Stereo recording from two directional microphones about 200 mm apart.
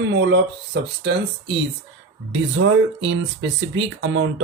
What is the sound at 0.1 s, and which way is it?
Speech, 60° right (ahead or behind).